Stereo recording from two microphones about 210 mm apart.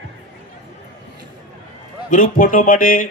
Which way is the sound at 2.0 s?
40° left (ahead or behind).